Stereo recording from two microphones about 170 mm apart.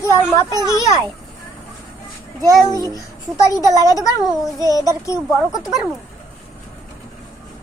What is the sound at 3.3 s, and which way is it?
Speech, 20° left (ahead or behind).